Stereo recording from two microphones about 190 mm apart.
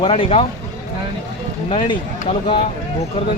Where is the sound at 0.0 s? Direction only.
30° left (ahead or behind).